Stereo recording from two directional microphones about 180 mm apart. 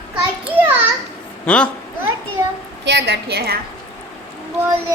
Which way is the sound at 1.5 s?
10° left (ahead or behind).